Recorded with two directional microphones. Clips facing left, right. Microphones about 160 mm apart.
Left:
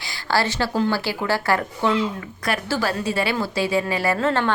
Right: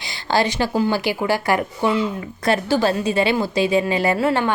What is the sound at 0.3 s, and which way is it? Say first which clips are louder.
A woman's voice: right 3 dB; 15° right (ahead or behind).